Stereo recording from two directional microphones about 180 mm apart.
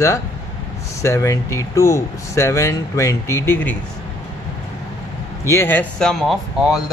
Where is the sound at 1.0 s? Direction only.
15° left (ahead or behind).